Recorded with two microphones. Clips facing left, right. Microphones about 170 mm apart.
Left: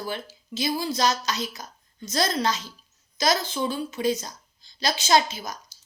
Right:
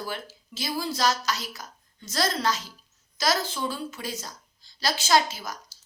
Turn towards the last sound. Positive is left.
turn(degrees=20)  # may be behind; listen again after turning